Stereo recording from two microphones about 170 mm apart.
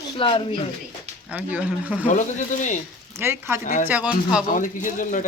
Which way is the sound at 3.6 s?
50° left (ahead or behind).